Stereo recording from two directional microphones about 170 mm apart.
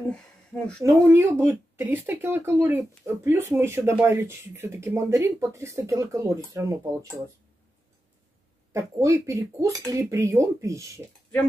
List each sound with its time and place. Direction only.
0.5 s speech: 5° left (ahead or behind)
0.8 s speech: 15° right (ahead or behind)
8.7 s speech: 15° right (ahead or behind)